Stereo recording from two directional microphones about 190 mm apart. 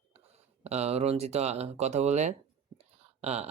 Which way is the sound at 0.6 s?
35° right (ahead or behind).